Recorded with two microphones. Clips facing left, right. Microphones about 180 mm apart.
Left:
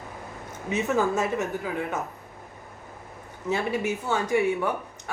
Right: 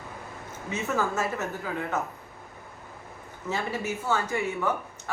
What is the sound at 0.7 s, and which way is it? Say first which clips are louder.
Speech: left 4 dB; 15° left (ahead or behind).